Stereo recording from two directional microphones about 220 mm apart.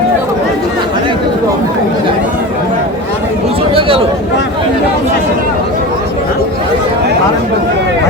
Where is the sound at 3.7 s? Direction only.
25° right (ahead or behind).